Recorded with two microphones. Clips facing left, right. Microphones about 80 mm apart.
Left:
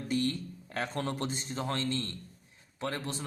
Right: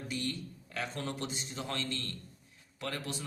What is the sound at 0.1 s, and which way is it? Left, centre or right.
A man's voice, left.